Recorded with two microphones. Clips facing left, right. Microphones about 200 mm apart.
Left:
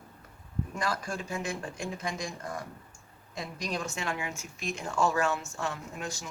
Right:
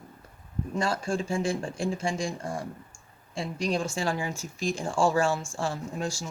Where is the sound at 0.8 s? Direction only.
30° right (ahead or behind).